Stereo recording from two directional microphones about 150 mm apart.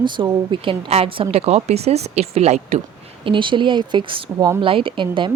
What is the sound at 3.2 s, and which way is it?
Speech, 35° right (ahead or behind).